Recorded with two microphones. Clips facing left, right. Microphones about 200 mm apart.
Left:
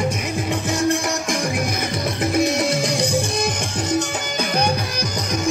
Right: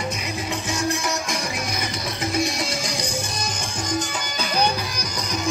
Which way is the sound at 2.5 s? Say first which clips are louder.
Left 7 dB; 60° left (ahead or behind).